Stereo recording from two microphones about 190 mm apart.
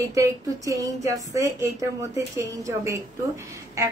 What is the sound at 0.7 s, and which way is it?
A woman's voice, 15° right (ahead or behind).